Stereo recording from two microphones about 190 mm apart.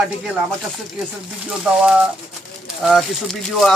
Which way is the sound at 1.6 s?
5° right (ahead or behind).